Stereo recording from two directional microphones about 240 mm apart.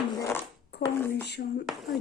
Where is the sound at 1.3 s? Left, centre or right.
Left.